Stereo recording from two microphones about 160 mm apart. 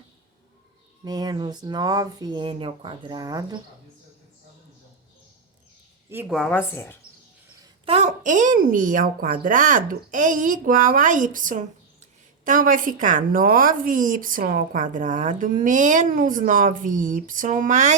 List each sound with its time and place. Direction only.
1.0 s speech: 25° right (ahead or behind)
6.2 s a woman's voice: centre (ahead or behind)
6.6 s speech: 15° left (ahead or behind)
7.9 s a woman's voice: 45° right (ahead or behind)